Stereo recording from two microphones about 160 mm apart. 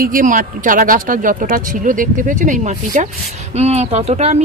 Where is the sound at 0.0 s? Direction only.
60° right (ahead or behind).